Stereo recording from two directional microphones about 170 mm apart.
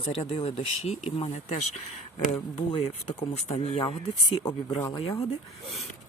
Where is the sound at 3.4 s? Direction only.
35° left (ahead or behind).